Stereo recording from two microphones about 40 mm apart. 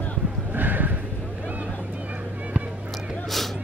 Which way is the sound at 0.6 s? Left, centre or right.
Right.